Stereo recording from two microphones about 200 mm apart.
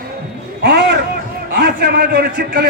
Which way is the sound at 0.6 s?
55° right (ahead or behind).